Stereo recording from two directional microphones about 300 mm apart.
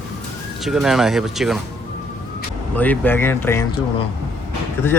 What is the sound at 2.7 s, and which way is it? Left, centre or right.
Speech, centre.